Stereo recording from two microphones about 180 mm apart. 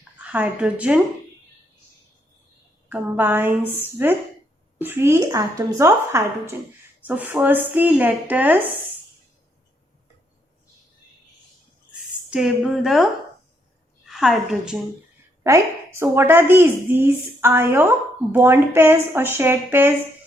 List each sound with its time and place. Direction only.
0.3 s a woman's voice: 10° right (ahead or behind)
2.9 s a woman's voice: 10° right (ahead or behind)
12.3 s a woman's voice: 5° right (ahead or behind)
14.1 s a woman's voice: centre (ahead or behind)
15.4 s a woman's voice: 15° right (ahead or behind)